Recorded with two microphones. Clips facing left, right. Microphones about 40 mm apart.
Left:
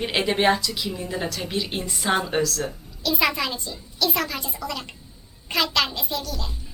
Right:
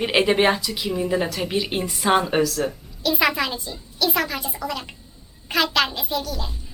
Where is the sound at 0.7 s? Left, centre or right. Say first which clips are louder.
Right 6 dB; right.